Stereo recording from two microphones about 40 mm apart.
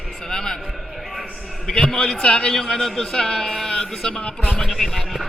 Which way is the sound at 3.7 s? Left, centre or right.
Centre.